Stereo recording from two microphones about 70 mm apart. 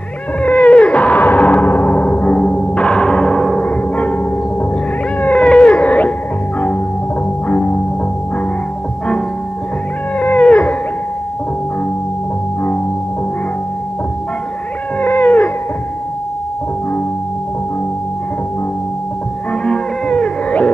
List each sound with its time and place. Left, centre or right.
0.4 s cat: centre
3.6 s music: left
5.2 s cat: centre
5.8 s music: left
7.4 s music: centre
10.1 s cat: left
15.0 s a sound: left
19.6 s music: centre